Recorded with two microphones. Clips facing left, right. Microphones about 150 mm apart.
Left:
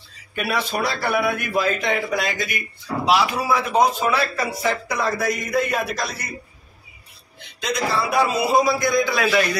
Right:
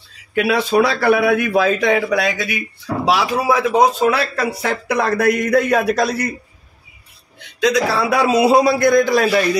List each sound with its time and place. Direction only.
0.3 s a man's voice: 70° right (ahead or behind)
7.6 s speech: 90° right; by 9.5 s 35° right (ahead or behind)